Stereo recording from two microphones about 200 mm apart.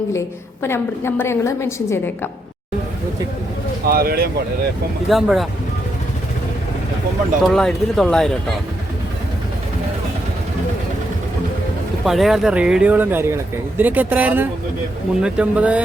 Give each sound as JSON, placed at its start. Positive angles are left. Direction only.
{"t": 0.6, "sound": "a woman's voice", "side_deg": 10}
{"t": 3.8, "sound": "speech", "side_deg": -50}
{"t": 5.0, "sound": "speech", "side_deg": 0}
{"t": 7.4, "sound": "speech", "side_deg": 0}
{"t": 12.0, "sound": "speech", "side_deg": 0}